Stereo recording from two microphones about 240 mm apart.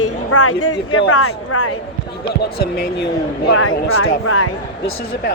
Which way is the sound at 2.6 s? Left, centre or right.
Left.